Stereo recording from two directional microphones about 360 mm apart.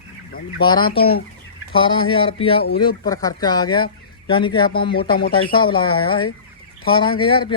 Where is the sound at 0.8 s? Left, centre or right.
Left.